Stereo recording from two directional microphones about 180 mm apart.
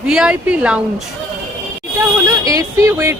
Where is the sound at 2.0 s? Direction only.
15° right (ahead or behind).